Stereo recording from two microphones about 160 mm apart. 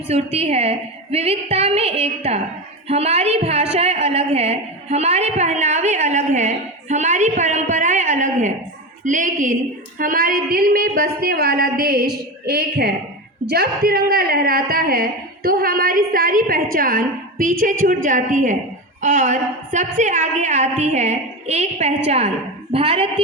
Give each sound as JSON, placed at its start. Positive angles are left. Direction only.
{"t": 0.1, "sound": "a woman's voice", "side_deg": -40}